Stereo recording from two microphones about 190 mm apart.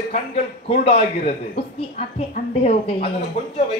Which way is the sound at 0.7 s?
35° left (ahead or behind).